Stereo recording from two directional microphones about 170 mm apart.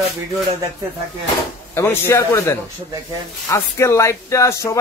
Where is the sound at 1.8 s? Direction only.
15° left (ahead or behind).